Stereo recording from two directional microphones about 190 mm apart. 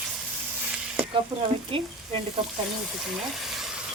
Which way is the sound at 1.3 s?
25° right (ahead or behind).